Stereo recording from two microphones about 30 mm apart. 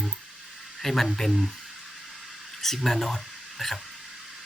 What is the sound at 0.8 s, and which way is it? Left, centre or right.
Speech, centre.